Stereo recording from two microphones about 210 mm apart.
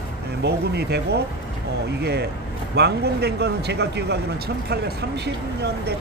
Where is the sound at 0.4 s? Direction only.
50° right (ahead or behind).